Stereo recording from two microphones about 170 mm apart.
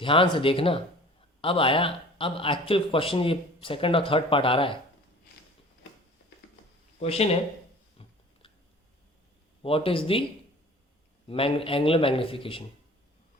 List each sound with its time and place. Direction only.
0.0 s speech: 30° left (ahead or behind)
7.0 s speech: 35° left (ahead or behind)
7.9 s a sound: 30° left (ahead or behind)
9.6 s speech: 35° left (ahead or behind)
11.3 s speech: 35° left (ahead or behind)